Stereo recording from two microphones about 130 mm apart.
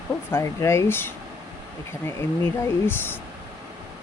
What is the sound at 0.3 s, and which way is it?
Speech, 20° left (ahead or behind).